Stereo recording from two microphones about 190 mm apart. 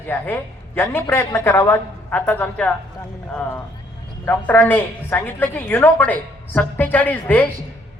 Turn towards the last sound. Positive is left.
turn(degrees=10)  # may be behind; listen again after turning